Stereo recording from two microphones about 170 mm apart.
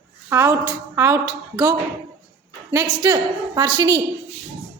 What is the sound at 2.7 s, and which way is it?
A woman's voice, 20° right (ahead or behind).